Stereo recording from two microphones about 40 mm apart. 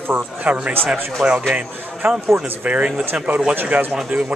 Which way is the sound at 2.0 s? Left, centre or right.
Right.